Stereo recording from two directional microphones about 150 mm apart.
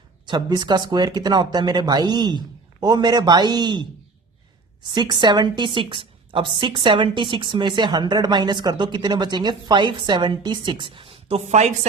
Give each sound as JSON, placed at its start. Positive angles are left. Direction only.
{"t": 0.3, "sound": "speech", "side_deg": -25}
{"t": 4.9, "sound": "a woman's voice", "side_deg": -30}